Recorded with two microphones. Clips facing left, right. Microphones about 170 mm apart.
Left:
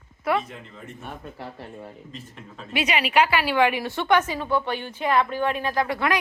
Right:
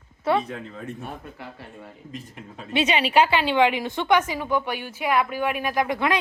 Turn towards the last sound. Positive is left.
turn(degrees=-20)  # may be behind; listen again after turning